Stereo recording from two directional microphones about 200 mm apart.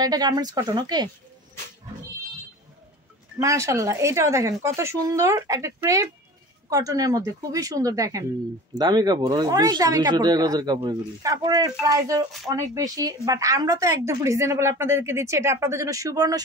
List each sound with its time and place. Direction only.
0.0 s speech: 20° right (ahead or behind)
3.3 s speech: 15° right (ahead or behind)